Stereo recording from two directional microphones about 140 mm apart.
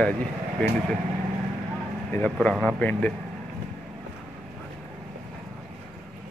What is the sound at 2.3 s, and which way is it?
Speech, 5° left (ahead or behind).